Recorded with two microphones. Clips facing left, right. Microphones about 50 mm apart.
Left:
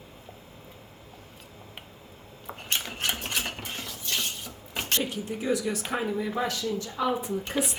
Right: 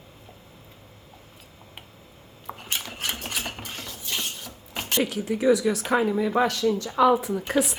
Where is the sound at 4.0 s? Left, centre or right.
Centre.